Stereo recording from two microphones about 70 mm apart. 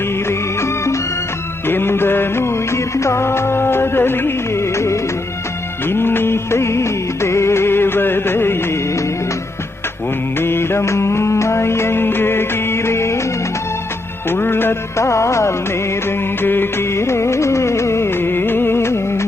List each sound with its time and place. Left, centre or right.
0.3 s music: left
5.9 s music of bollywood: left
10.3 s music: left
14.3 s music: left
16.0 s music: left